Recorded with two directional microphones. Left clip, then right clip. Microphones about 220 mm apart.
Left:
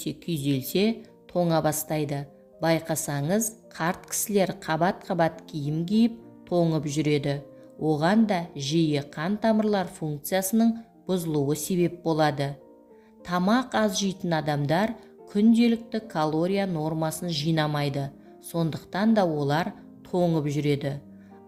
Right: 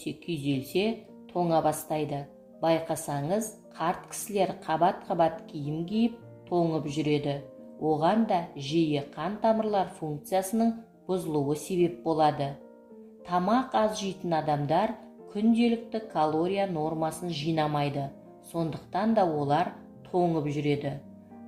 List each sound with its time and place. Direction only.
0.0 s speech: 50° left (ahead or behind)